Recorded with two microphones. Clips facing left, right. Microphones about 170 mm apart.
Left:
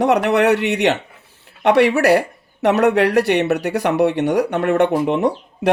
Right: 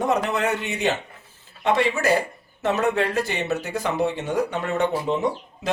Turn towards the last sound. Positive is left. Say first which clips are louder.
# left 7 dB
turn(degrees=65)  # may be behind; listen again after turning